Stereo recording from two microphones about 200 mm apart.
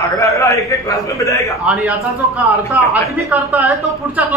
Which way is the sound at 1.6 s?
5° right (ahead or behind).